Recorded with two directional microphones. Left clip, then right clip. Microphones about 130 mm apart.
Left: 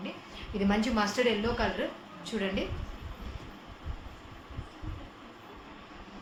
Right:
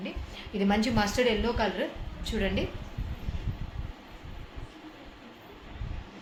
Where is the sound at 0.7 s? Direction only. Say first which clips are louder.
Right 2 dB; 45° right (ahead or behind).